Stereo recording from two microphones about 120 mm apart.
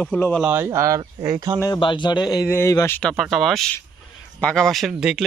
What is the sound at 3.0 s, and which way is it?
Speech, centre (ahead or behind).